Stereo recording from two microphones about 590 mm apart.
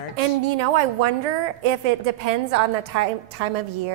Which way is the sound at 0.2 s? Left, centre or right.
Right.